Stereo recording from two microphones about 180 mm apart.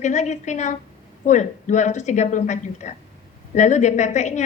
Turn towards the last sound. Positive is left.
turn(degrees=40)  # may be behind; listen again after turning